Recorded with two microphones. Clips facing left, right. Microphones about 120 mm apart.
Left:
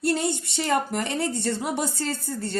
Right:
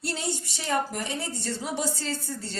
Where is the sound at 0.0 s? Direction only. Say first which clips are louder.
Left 7 dB; 55° left (ahead or behind).